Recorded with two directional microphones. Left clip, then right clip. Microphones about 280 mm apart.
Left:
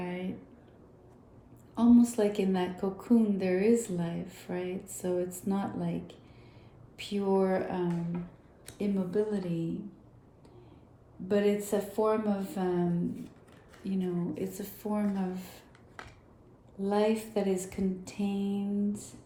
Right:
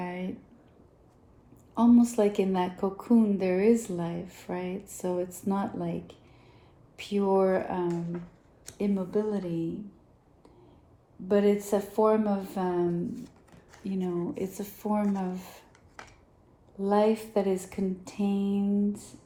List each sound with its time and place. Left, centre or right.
0.0 s a sound: centre
1.7 s speech: centre
11.3 s speech: centre
13.8 s speech: centre
16.7 s speech: centre